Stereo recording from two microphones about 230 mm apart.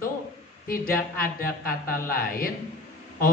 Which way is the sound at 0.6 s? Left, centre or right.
Left.